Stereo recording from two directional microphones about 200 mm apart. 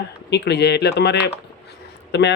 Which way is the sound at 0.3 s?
55° left (ahead or behind).